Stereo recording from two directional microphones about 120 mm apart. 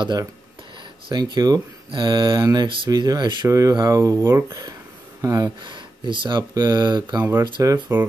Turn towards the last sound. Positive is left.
turn(degrees=-30)  # may be behind; listen again after turning